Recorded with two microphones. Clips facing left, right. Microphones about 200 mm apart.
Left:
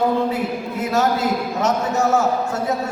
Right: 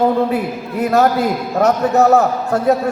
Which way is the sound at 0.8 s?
60° right (ahead or behind).